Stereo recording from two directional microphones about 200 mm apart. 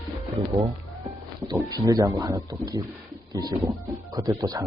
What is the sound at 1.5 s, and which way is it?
Speech, 20° right (ahead or behind).